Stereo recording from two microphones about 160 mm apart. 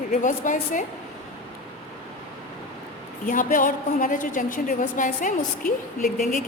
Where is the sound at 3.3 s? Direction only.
60° left (ahead or behind).